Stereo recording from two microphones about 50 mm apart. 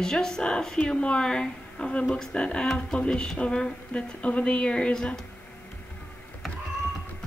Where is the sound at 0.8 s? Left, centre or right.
Left.